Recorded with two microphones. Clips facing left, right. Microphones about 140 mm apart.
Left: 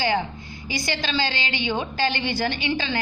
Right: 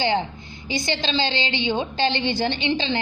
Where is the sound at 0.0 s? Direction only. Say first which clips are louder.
Right 1 dB; 25° right (ahead or behind).